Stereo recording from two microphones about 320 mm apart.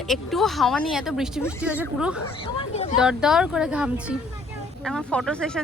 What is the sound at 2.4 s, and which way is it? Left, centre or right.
Speech, centre.